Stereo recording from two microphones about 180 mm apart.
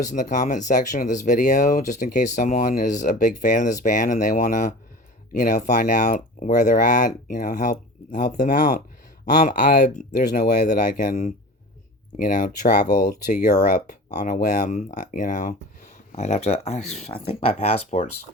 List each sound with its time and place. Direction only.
0.1 s speech: 45° left (ahead or behind)